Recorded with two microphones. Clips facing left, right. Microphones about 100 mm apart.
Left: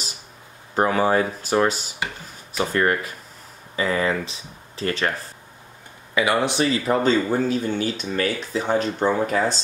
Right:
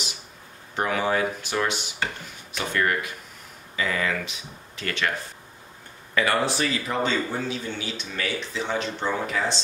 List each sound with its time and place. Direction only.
0.7 s speech: 35° left (ahead or behind)
6.1 s speech: 15° left (ahead or behind)
6.9 s speech: 40° left (ahead or behind)